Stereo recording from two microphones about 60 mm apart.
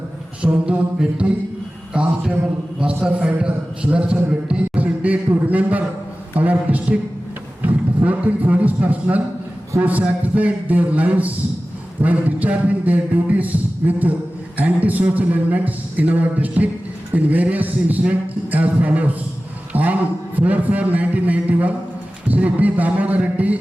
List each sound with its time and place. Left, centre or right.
0.6 s a man's voice: centre